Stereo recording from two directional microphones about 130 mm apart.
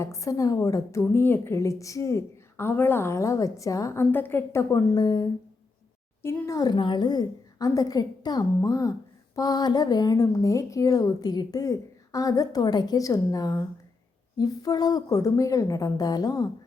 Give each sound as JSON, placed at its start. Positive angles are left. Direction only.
{"t": 0.0, "sound": "a woman's voice", "side_deg": 25}